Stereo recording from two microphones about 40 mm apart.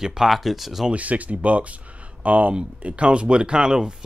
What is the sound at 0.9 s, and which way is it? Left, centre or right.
Speech, right.